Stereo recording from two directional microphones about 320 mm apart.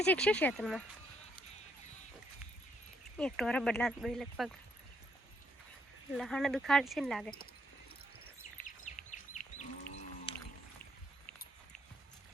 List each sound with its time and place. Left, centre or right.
0.0 s speech: centre
3.2 s speech: centre
6.1 s speech: centre
9.6 s livestock: left